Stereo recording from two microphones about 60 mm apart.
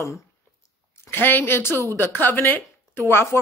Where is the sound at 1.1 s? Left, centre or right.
Left.